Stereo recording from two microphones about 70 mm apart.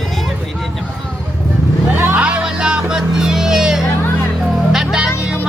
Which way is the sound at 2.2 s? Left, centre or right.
Centre.